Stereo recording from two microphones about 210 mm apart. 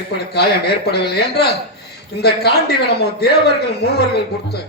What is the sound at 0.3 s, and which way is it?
Speech, 50° left (ahead or behind).